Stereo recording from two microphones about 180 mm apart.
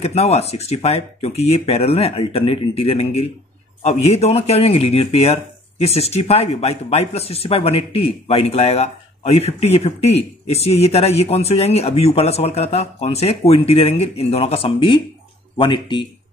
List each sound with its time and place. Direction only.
0.0 s speech: 35° left (ahead or behind)